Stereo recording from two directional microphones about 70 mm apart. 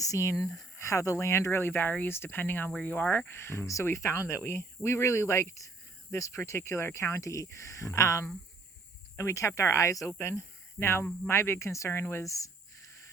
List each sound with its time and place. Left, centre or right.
0.0 s speech: left
3.2 s speech: left
10.1 s speech: left
12.2 s a sound: left